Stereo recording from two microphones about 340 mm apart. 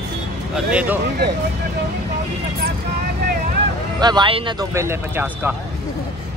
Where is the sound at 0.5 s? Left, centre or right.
Centre.